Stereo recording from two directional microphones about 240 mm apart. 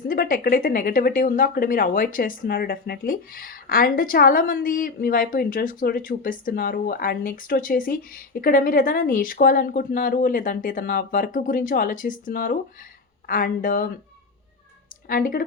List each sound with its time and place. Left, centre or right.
0.1 s speech: left
15.0 s speech: left